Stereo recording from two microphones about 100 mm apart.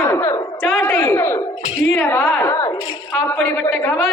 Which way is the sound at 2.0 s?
20° left (ahead or behind).